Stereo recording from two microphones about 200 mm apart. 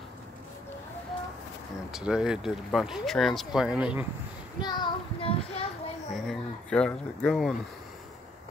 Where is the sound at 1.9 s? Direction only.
5° right (ahead or behind).